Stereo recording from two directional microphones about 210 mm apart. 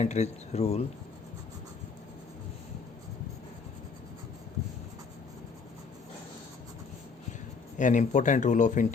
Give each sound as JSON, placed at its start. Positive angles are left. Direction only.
{"t": 0.0, "sound": "speech", "side_deg": 30}
{"t": 7.8, "sound": "speech", "side_deg": 35}